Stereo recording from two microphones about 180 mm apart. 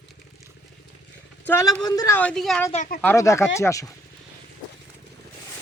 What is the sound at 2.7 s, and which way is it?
Speech, 45° left (ahead or behind).